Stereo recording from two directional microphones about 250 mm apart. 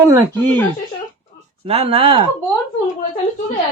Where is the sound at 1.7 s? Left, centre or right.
Right.